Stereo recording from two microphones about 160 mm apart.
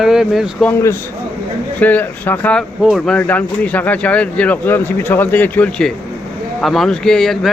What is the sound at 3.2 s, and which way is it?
A man's voice, 10° left (ahead or behind).